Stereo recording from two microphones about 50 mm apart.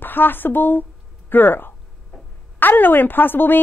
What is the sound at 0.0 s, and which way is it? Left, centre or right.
A woman's voice, left.